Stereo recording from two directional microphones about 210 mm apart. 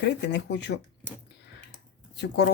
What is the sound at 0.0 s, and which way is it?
Speech, 55° left (ahead or behind).